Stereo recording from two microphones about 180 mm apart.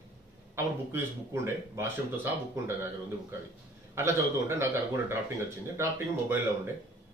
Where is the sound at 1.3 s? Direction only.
15° right (ahead or behind).